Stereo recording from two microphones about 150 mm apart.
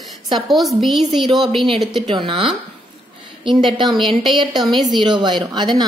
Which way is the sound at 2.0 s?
30° right (ahead or behind).